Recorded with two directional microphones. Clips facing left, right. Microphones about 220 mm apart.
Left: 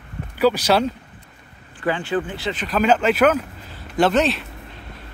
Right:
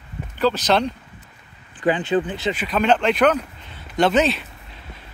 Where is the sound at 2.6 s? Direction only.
Centre (ahead or behind).